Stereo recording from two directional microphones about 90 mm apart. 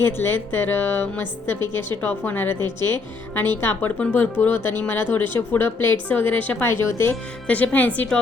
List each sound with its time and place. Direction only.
0.0 s speech: 25° left (ahead or behind)
6.8 s speech: 30° left (ahead or behind)
7.4 s speech: 15° left (ahead or behind)